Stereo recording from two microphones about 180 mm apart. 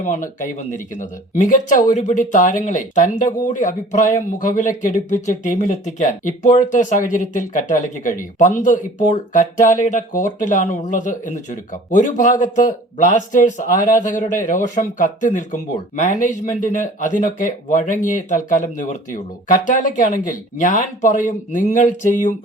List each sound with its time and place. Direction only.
0.0 s speech: 40° left (ahead or behind)